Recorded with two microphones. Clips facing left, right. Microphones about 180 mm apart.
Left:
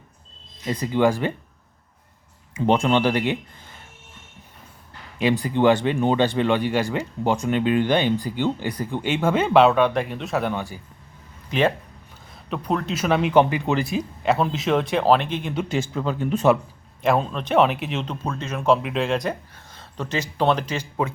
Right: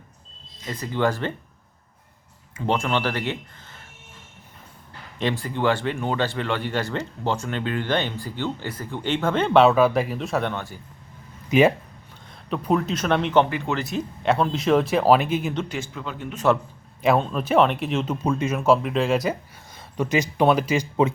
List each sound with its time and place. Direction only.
0.7 s speech: 15° left (ahead or behind)
2.6 s speech: 20° left (ahead or behind)
5.1 s speech: 15° left (ahead or behind)
10.5 s speech: 10° left (ahead or behind)
12.5 s speech: 5° right (ahead or behind)
15.7 s speech: 35° left (ahead or behind)
17.0 s speech: centre (ahead or behind)